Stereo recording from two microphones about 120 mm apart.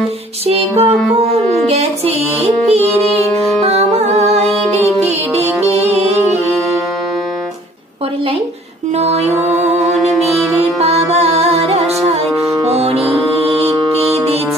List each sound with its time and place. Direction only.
0.5 s music: 55° right (ahead or behind)
8.9 s music: 65° right (ahead or behind)